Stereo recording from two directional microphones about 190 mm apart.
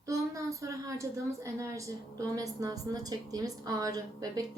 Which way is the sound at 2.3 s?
15° right (ahead or behind).